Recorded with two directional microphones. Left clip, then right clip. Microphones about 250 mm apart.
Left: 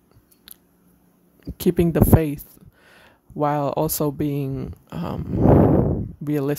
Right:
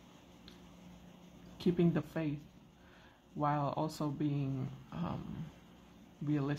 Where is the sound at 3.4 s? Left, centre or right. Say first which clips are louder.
Left 13 dB; left.